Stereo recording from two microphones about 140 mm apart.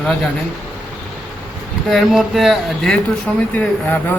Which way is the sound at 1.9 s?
Centre (ahead or behind).